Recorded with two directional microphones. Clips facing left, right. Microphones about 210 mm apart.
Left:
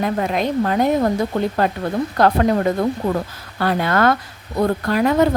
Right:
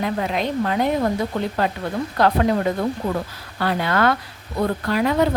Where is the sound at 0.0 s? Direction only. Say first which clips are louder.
Left 3 dB; 45° left (ahead or behind).